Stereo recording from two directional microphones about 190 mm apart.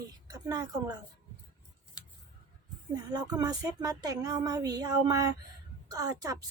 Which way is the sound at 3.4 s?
20° right (ahead or behind).